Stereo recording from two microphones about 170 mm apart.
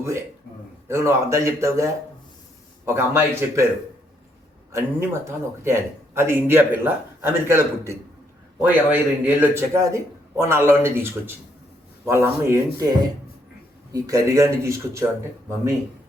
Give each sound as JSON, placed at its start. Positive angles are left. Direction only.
{"t": 0.9, "sound": "a man's voice", "side_deg": -15}
{"t": 4.7, "sound": "a man's voice", "side_deg": -15}